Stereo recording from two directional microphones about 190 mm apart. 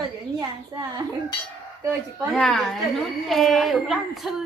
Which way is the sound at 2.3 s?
Centre (ahead or behind).